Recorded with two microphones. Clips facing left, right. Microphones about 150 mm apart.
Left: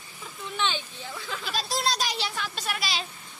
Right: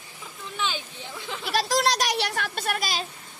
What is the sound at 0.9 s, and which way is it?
Speech, 20° right (ahead or behind).